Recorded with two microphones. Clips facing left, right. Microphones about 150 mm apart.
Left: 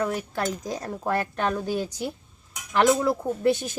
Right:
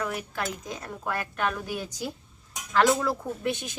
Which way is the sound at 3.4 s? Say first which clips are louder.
Left 8 dB; 35° left (ahead or behind).